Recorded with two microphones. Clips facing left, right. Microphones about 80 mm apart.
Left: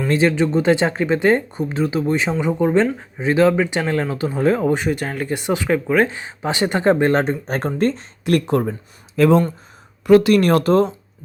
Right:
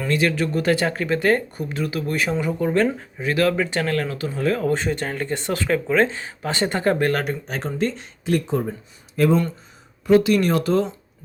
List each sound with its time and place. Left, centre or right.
0.1 s speech: left
4.6 s speech: centre
7.4 s speech: left
8.2 s speech: left
9.1 s speech: left
10.1 s speech: left
10.3 s speech: left